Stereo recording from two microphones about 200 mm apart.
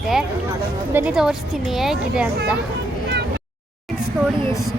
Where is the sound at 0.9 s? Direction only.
5° right (ahead or behind).